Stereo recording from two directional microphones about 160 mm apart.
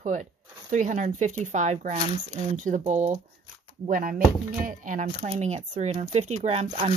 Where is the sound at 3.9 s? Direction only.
60° right (ahead or behind).